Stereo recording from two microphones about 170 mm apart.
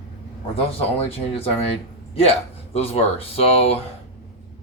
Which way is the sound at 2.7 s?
35° left (ahead or behind).